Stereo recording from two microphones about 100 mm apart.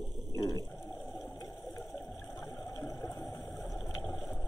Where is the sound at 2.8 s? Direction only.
30° left (ahead or behind).